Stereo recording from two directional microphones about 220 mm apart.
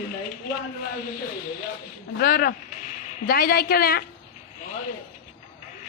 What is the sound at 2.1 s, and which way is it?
A woman's voice, 45° left (ahead or behind).